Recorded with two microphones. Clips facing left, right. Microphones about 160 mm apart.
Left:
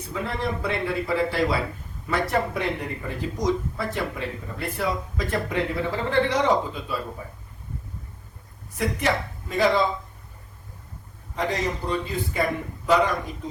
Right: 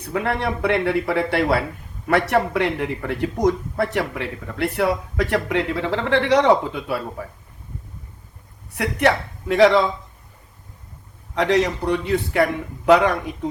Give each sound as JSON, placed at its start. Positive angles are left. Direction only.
{"t": 0.0, "sound": "a man's voice", "side_deg": -65}
{"t": 8.7, "sound": "a man's voice", "side_deg": -65}
{"t": 11.3, "sound": "a man's voice", "side_deg": -75}